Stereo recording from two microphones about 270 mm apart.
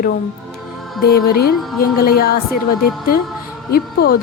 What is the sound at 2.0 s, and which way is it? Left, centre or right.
Speech, left.